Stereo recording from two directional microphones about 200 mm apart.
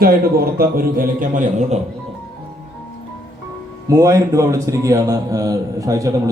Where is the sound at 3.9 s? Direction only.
15° right (ahead or behind).